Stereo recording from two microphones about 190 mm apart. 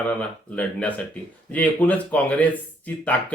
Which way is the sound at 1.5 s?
10° left (ahead or behind).